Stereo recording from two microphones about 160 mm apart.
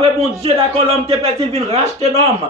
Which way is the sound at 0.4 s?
35° right (ahead or behind).